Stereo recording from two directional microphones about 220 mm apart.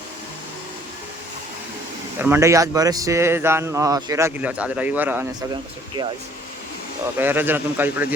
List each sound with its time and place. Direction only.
2.1 s a man's voice: 10° right (ahead or behind)
7.2 s a man's voice: 10° right (ahead or behind)